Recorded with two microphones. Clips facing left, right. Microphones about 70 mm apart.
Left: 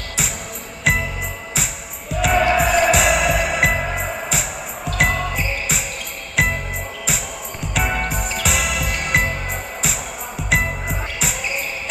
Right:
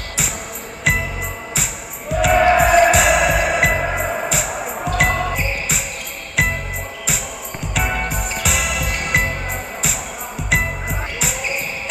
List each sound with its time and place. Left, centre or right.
0.9 s music: centre
7.6 s music: centre